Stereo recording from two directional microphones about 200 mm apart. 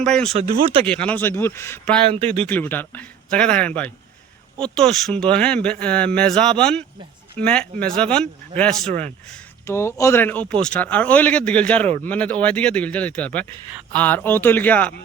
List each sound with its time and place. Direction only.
0.0 s speech: 5° left (ahead or behind)
0.3 s speech: 30° right (ahead or behind)
0.9 s speech: 5° left (ahead or behind)
2.0 s speech: 30° right (ahead or behind)
2.4 s speech: 10° left (ahead or behind)
8.9 s speech: 35° right (ahead or behind)
9.3 s speech: 15° left (ahead or behind)